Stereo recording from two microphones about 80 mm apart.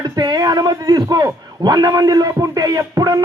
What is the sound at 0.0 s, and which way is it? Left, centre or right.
A man's voice, right.